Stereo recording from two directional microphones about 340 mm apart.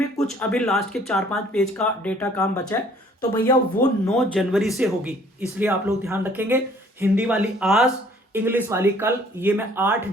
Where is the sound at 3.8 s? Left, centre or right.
Left.